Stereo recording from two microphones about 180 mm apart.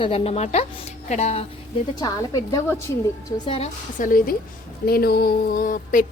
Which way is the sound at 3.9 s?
50° left (ahead or behind).